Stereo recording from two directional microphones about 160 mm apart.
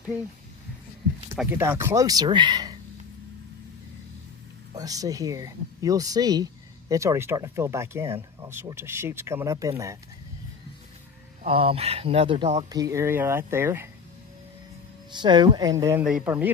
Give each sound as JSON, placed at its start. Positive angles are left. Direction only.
{"t": 1.4, "sound": "speech", "side_deg": -10}
{"t": 4.7, "sound": "speech", "side_deg": -20}
{"t": 11.4, "sound": "speech", "side_deg": -35}
{"t": 12.7, "sound": "speech", "side_deg": -20}
{"t": 15.1, "sound": "speech", "side_deg": -30}
{"t": 16.0, "sound": "speech", "side_deg": -5}